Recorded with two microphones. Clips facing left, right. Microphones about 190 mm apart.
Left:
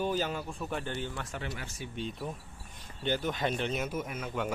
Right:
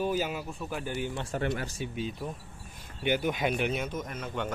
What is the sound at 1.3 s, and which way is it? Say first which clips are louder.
Speech: right 8 dB; 45° right (ahead or behind).